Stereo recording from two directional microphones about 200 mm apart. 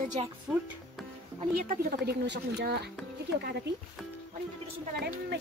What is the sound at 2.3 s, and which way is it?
Speech, 55° right (ahead or behind).